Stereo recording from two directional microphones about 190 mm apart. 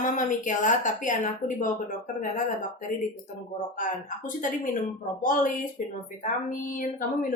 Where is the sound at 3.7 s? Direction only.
45° left (ahead or behind).